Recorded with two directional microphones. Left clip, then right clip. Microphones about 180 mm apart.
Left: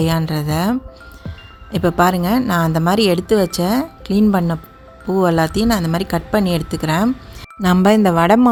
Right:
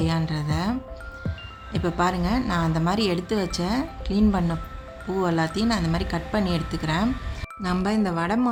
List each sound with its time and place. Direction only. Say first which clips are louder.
0.0 s speech: left 8 dB; 45° left (ahead or behind)